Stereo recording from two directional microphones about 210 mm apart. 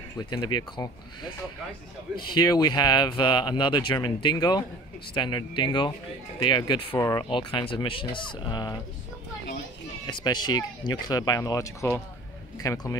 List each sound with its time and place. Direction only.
0.3 s speech: 20° left (ahead or behind)
2.3 s speech: 20° left (ahead or behind)
10.0 s speech: 20° left (ahead or behind)